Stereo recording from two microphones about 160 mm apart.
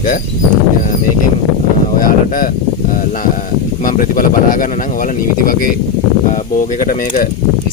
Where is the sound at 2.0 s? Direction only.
60° left (ahead or behind).